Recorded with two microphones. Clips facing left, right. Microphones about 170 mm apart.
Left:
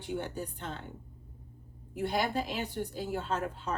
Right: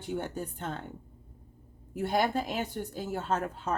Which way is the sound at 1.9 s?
45° right (ahead or behind).